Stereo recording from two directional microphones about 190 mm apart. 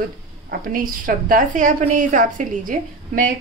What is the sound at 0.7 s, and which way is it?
A woman's voice, 45° right (ahead or behind).